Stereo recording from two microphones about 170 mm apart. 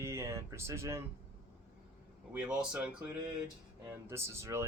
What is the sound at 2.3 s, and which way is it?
Speech, 10° right (ahead or behind).